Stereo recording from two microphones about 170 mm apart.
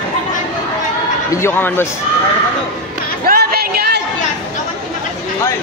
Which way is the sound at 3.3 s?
65° right (ahead or behind).